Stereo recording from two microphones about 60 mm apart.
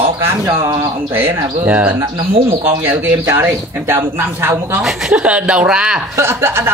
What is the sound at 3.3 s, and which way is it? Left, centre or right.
A man's voice, right.